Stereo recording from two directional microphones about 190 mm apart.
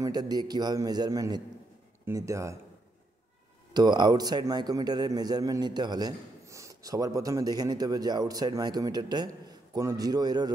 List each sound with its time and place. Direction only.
0.0 s a man's voice: 20° right (ahead or behind)
3.7 s a man's voice: 20° right (ahead or behind)